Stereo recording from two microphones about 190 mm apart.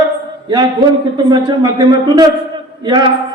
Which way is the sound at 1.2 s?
20° right (ahead or behind).